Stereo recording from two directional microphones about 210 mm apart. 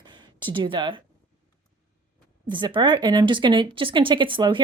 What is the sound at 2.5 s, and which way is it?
A woman's voice, 20° right (ahead or behind).